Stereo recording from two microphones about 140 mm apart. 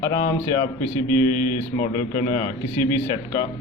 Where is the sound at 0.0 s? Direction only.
30° left (ahead or behind).